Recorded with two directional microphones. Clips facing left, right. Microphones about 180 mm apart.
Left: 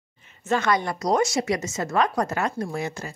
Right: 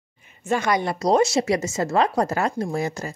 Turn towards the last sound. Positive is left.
turn(degrees=-40)  # may be behind; listen again after turning